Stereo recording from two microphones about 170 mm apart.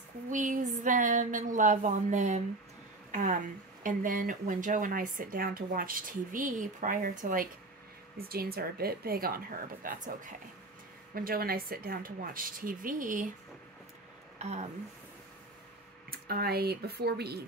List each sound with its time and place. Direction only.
0.3 s speech: 50° right (ahead or behind)
3.1 s a sound: 50° right (ahead or behind)
3.8 s speech: 55° right (ahead or behind)
11.1 s speech: 60° right (ahead or behind)
14.4 s speech: 40° right (ahead or behind)
16.1 s speech: 65° right (ahead or behind)